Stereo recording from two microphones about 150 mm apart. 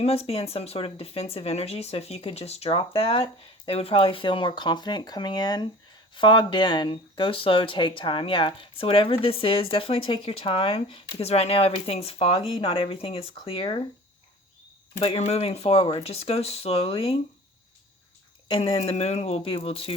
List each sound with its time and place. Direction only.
0.0 s speech: 40° left (ahead or behind)
14.9 s speech: 40° left (ahead or behind)
18.5 s speech: 40° left (ahead or behind)